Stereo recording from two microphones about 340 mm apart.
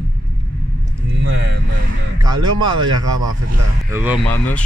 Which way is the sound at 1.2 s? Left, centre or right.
Right.